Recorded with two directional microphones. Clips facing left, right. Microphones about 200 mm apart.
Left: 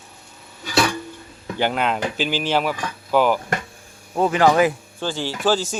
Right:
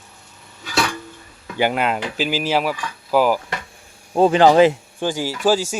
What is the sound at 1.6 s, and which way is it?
Speech, 5° right (ahead or behind).